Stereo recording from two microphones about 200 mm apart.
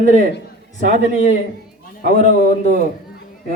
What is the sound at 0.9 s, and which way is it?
A man's voice, 35° left (ahead or behind).